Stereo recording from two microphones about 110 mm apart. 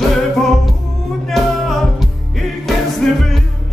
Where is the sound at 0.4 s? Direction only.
Centre (ahead or behind).